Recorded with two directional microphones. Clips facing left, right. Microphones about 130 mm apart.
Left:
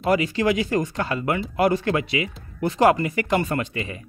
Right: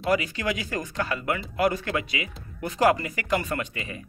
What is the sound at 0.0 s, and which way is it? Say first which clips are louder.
Speech: left 5 dB; 30° left (ahead or behind).